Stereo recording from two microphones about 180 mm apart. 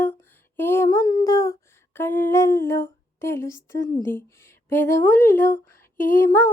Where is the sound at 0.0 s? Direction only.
10° left (ahead or behind).